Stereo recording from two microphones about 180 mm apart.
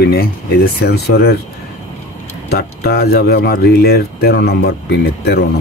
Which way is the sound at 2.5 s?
60° left (ahead or behind).